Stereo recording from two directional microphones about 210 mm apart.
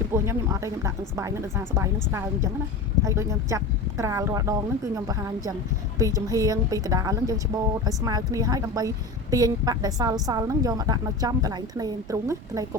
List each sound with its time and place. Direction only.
0.1 s a woman's voice: 15° right (ahead or behind)